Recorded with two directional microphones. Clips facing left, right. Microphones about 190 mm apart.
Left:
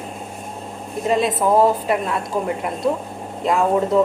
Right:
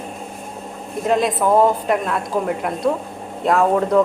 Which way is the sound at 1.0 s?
Centre (ahead or behind).